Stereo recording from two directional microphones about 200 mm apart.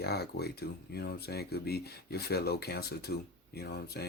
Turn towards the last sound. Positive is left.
turn(degrees=55)  # may be behind; listen again after turning